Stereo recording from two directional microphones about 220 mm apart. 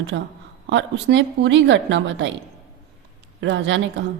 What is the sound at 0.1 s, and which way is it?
A woman's voice, 55° right (ahead or behind).